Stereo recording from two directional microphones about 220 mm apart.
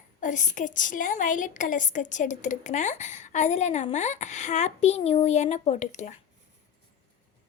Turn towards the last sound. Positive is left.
turn(degrees=30)  # may be behind; listen again after turning